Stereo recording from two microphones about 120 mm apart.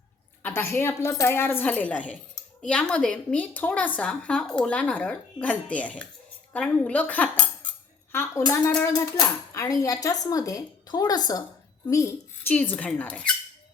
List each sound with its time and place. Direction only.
0.4 s a woman's voice: 15° left (ahead or behind)
8.1 s a woman's voice: 20° left (ahead or behind)